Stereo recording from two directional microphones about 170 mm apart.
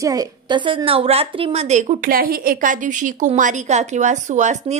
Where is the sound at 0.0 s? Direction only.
20° right (ahead or behind); by 2.0 s 40° right (ahead or behind).